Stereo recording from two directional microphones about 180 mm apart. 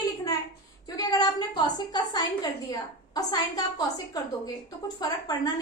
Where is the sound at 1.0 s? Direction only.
25° left (ahead or behind).